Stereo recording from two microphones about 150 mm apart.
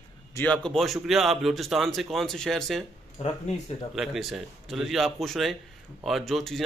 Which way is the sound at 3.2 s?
45° left (ahead or behind).